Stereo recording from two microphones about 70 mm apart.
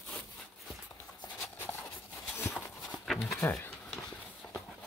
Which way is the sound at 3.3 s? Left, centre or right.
Left.